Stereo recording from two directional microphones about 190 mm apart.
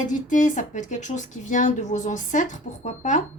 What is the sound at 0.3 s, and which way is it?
A woman's voice, 40° left (ahead or behind).